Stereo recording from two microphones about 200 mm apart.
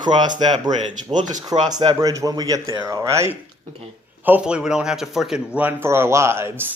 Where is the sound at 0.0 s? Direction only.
20° right (ahead or behind).